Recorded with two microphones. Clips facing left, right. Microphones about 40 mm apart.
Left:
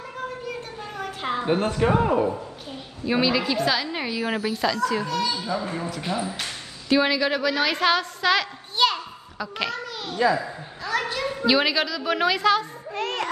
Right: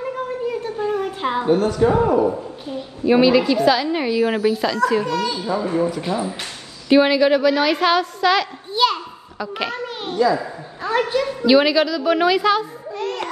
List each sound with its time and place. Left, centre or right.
0.7 s a sound: right
1.4 s speech: left
3.1 s a woman's voice: centre
4.2 s a woman's voice: right
4.5 s speech: centre
5.0 s a woman's voice: right
6.9 s a woman's voice: centre
9.7 s a child's voice: right
11.1 s a woman's voice: centre
12.9 s music: left